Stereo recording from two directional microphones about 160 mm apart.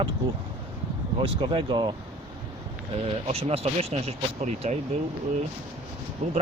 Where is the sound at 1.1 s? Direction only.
35° right (ahead or behind).